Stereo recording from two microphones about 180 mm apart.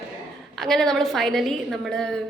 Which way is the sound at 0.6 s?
Centre (ahead or behind).